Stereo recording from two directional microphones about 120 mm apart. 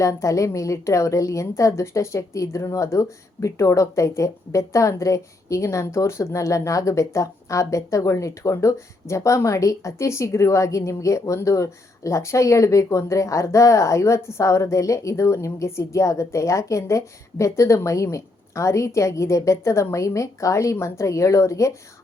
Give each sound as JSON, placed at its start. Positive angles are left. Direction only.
{"t": 0.0, "sound": "a woman's voice", "side_deg": 25}